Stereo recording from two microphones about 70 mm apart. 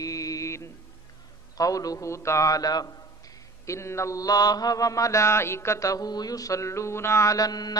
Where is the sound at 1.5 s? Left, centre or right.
Left.